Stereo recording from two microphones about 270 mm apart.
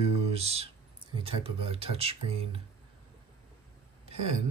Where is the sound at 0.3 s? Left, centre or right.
Right.